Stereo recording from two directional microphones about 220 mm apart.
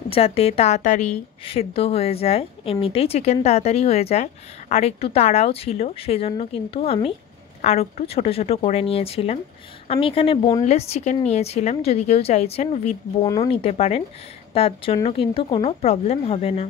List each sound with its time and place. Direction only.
0.1 s speech: 25° left (ahead or behind)